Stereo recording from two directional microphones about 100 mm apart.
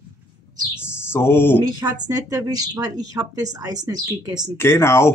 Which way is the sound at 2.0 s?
35° right (ahead or behind).